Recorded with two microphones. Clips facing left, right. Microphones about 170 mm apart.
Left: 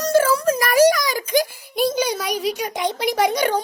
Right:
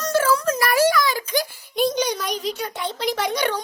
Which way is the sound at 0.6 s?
45° left (ahead or behind).